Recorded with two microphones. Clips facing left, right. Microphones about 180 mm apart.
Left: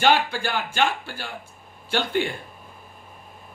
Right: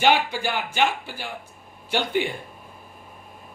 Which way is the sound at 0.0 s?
15° right (ahead or behind).